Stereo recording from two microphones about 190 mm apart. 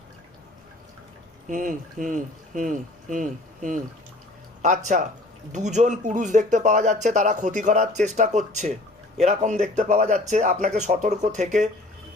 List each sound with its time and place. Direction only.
1.5 s speech: 45° right (ahead or behind)